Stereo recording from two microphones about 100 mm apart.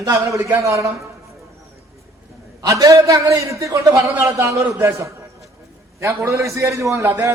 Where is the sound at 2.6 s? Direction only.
35° right (ahead or behind).